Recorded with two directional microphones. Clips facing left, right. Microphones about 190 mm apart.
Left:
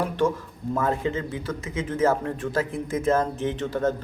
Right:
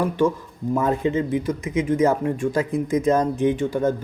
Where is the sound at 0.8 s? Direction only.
20° right (ahead or behind).